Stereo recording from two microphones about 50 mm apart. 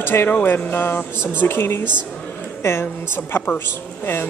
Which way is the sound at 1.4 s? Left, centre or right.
Left.